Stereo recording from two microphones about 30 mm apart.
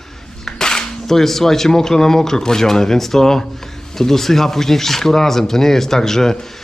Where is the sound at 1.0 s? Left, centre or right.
Centre.